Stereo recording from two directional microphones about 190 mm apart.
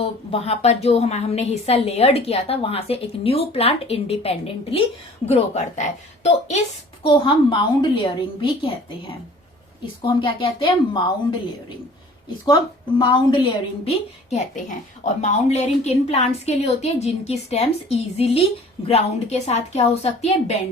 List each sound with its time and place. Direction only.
0.0 s a woman's voice: 30° left (ahead or behind)
7.0 s a woman's voice: 25° left (ahead or behind)
13.0 s a woman's voice: 25° left (ahead or behind)